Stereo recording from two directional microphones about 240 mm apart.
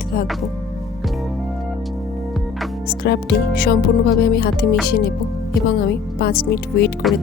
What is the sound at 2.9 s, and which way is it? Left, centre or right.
Speech, left.